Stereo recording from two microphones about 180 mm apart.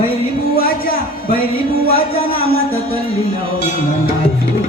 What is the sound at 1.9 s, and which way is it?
Speech, 30° left (ahead or behind).